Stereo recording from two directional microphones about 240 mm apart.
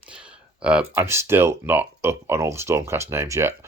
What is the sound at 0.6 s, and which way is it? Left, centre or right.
Speech, centre.